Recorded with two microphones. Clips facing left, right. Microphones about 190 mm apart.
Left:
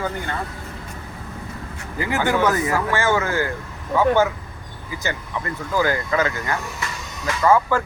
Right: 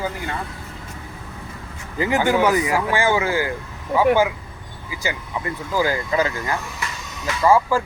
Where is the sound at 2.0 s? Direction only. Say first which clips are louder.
Right 2 dB; 15° right (ahead or behind).